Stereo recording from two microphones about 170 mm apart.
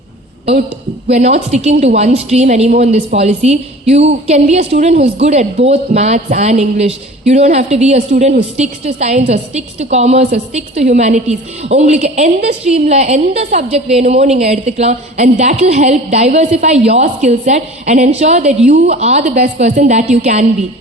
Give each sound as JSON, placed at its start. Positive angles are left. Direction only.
{"t": 1.1, "sound": "a woman's voice", "side_deg": -40}